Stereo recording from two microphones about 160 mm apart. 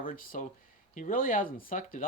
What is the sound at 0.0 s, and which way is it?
Speech, 60° left (ahead or behind).